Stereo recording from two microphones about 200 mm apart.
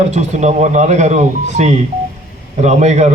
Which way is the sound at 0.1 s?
35° right (ahead or behind).